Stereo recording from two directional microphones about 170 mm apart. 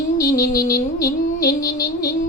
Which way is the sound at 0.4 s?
60° left (ahead or behind).